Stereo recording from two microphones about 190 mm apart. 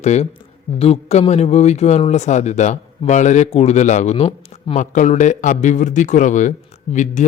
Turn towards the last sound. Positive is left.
turn(degrees=40)  # may be behind; listen again after turning